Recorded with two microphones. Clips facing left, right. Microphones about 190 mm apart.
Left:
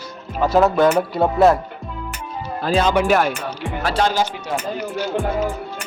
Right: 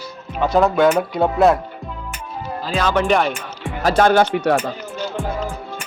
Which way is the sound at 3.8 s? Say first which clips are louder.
Right 6 dB; 50° right (ahead or behind).